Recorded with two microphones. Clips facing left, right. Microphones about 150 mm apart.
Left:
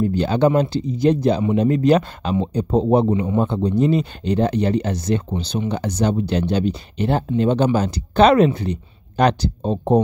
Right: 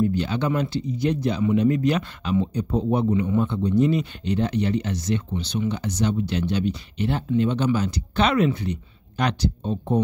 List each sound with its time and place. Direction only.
0.0 s speech: 35° left (ahead or behind)